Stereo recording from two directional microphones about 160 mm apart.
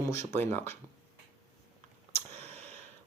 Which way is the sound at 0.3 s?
15° left (ahead or behind).